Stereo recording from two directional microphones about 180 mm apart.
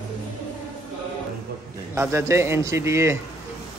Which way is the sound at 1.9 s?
15° right (ahead or behind).